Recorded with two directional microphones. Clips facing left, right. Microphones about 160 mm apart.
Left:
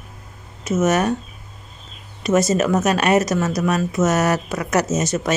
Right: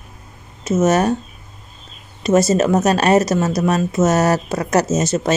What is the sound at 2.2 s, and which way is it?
Speech, 30° right (ahead or behind).